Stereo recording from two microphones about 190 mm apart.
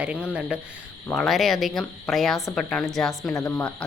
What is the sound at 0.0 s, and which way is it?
Speech, 5° right (ahead or behind).